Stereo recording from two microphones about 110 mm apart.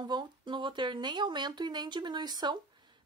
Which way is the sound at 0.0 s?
45° right (ahead or behind).